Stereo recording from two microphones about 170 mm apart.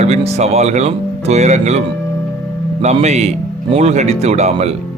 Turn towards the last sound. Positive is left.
turn(degrees=-40)  # may be behind; listen again after turning